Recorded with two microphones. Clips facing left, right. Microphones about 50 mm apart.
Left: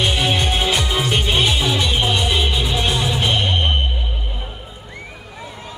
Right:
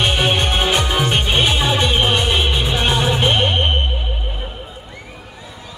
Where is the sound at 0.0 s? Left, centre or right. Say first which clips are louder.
Right 2 dB; right.